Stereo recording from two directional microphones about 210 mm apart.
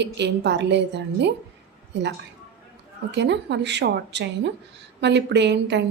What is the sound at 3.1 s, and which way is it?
A woman's voice, 55° right (ahead or behind).